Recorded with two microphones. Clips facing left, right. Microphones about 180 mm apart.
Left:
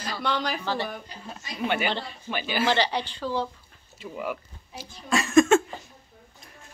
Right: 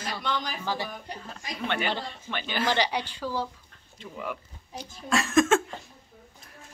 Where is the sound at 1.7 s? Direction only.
10° left (ahead or behind).